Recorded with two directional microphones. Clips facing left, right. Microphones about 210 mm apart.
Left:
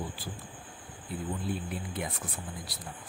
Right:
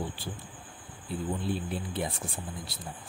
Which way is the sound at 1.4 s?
30° right (ahead or behind).